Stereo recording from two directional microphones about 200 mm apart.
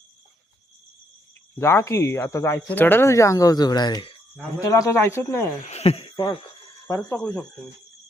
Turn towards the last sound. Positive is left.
turn(degrees=5)  # may be behind; listen again after turning